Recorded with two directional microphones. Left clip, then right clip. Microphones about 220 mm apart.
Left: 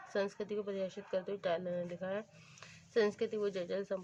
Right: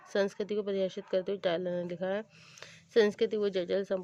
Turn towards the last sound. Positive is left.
turn(degrees=-40)  # may be behind; listen again after turning